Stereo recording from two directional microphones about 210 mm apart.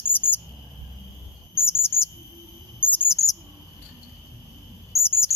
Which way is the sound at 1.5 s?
10° left (ahead or behind).